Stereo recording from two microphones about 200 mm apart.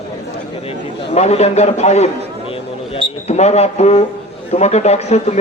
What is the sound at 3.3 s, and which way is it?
A man's voice, 35° left (ahead or behind).